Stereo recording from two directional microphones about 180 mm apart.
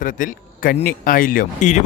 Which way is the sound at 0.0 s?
50° left (ahead or behind).